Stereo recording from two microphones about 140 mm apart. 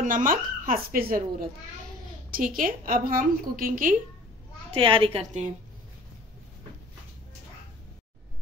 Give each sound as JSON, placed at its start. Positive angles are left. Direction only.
{"t": 0.0, "sound": "a woman's voice", "side_deg": -75}
{"t": 2.3, "sound": "a woman's voice", "side_deg": -75}
{"t": 4.7, "sound": "a woman's voice", "side_deg": -40}
{"t": 5.2, "sound": "a woman's voice", "side_deg": -55}